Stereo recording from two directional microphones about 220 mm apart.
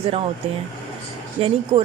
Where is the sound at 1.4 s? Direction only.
25° right (ahead or behind).